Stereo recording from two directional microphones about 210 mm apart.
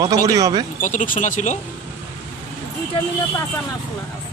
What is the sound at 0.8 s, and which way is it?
Speech, 35° left (ahead or behind).